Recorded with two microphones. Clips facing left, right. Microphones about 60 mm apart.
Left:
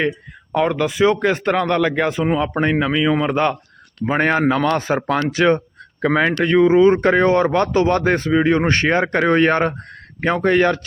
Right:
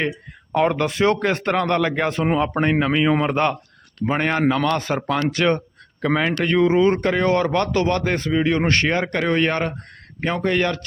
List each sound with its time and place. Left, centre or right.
0.5 s speech: centre
0.8 s speech: centre
2.2 s speech: centre
2.5 s speech: centre
2.9 s speech: centre
3.2 s speech: centre
4.0 s speech: centre
7.0 s speech: left